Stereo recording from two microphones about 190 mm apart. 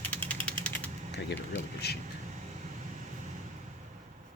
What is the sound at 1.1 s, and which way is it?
Vehicle, 65° left (ahead or behind).